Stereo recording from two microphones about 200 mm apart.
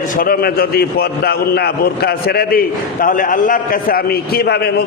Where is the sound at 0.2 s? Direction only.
50° left (ahead or behind).